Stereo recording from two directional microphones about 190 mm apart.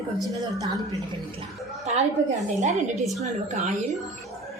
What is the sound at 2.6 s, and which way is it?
A woman's voice, 35° right (ahead or behind).